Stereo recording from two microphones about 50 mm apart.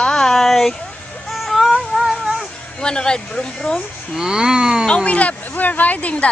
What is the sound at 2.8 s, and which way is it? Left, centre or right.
Speech, centre.